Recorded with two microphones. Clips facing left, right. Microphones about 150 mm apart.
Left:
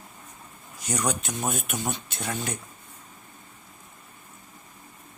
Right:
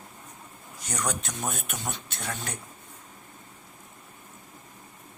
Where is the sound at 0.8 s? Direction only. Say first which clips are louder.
Left 3 dB; 5° left (ahead or behind).